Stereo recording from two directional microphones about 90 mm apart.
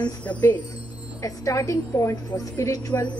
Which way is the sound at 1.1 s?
40° left (ahead or behind).